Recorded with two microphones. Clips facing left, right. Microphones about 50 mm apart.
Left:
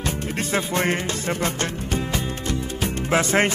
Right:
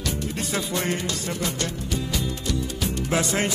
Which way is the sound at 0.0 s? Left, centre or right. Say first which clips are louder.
Left 2 dB; left.